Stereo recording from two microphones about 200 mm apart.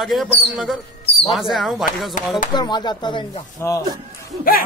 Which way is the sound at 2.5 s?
20° left (ahead or behind).